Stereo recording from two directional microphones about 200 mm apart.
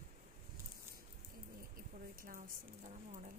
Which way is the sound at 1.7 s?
45° right (ahead or behind).